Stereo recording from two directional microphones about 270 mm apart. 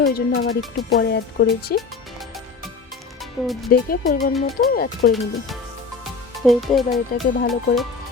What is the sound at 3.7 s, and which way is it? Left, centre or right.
Speech, left.